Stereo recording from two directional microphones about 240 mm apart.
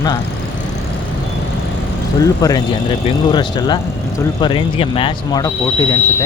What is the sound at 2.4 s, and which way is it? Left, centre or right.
Speech, centre.